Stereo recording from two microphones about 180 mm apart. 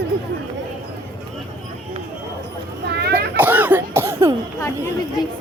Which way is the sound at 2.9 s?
65° right (ahead or behind).